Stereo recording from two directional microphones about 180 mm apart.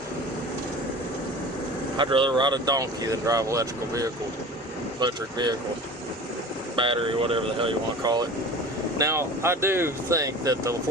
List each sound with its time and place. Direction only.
2.0 s speech: 30° right (ahead or behind)
6.7 s speech: 30° right (ahead or behind)